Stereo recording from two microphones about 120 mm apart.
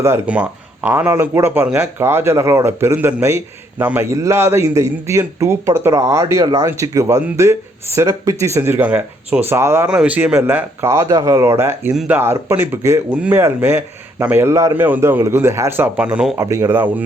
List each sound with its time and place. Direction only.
0.3 s speech: 10° right (ahead or behind)
9.9 s speech: 10° right (ahead or behind)
16.4 s speech: 25° right (ahead or behind)